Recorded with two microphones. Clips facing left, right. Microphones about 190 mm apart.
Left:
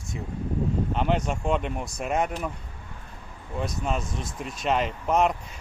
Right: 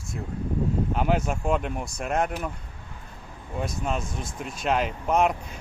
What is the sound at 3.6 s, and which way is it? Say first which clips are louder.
Speech: even; centre (ahead or behind).